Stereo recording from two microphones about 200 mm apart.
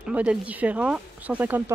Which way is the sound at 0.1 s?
5° right (ahead or behind).